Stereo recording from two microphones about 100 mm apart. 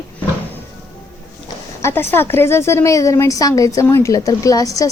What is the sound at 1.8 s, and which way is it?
A woman's voice, 25° left (ahead or behind).